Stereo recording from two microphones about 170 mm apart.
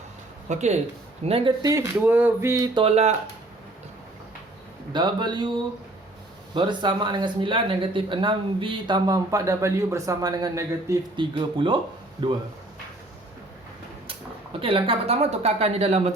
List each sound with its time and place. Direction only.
0.4 s speech: 45° right (ahead or behind)
1.6 s a sound: 20° right (ahead or behind)
2.7 s speech: 35° right (ahead or behind)
4.9 s speech: 25° right (ahead or behind)
6.5 s speech: 30° right (ahead or behind)
11.2 s speech: 30° right (ahead or behind)
14.6 s speech: 30° right (ahead or behind)